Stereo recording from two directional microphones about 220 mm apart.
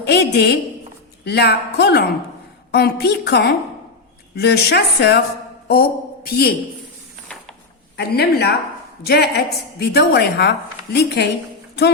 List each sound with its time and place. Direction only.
0.0 s a woman's voice: 45° left (ahead or behind)
7.9 s a woman's voice: 45° left (ahead or behind)